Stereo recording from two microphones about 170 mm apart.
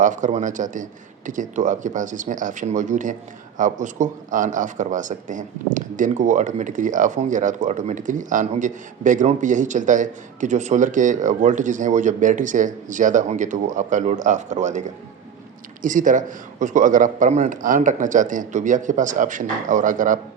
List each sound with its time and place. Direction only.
0.0 s speech: 45° right (ahead or behind)